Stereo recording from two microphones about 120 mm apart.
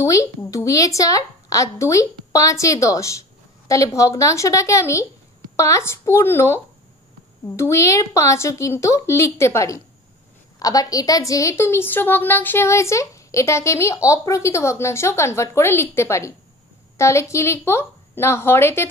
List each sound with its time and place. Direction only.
0.0 s a woman's voice: 25° left (ahead or behind)